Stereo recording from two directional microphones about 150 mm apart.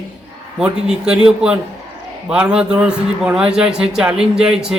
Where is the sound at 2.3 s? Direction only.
5° right (ahead or behind).